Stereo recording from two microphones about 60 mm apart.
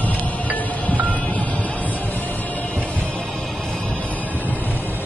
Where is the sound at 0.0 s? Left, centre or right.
Left.